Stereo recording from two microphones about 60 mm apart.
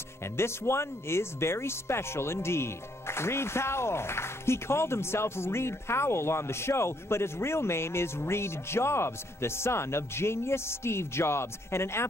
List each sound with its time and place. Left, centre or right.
0.4 s speech: left